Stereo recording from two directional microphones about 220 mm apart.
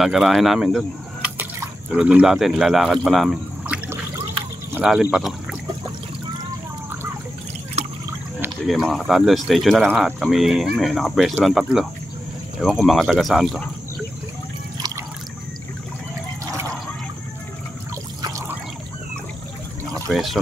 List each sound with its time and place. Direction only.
0.0 s speech: centre (ahead or behind)
7.8 s liquid: 30° right (ahead or behind)
8.4 s speech: centre (ahead or behind)
18.2 s pour: 15° right (ahead or behind)
20.1 s speech: centre (ahead or behind)